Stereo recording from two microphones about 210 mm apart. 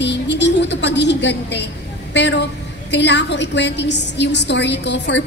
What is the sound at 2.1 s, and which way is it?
A woman's voice, 55° left (ahead or behind).